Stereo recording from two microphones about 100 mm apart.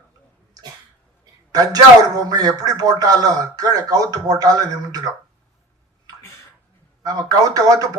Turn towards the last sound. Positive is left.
turn(degrees=-40)  # may be behind; listen again after turning